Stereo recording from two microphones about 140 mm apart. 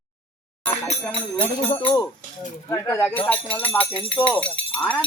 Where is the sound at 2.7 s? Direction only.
20° left (ahead or behind).